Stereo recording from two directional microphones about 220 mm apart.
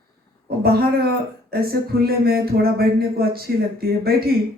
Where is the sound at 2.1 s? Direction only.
45° right (ahead or behind).